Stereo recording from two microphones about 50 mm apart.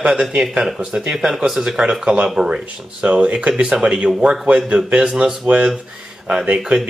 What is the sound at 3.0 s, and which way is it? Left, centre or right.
Speech, right.